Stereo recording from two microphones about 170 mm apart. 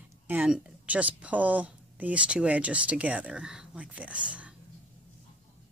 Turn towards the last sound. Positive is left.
turn(degrees=-5)  # may be behind; listen again after turning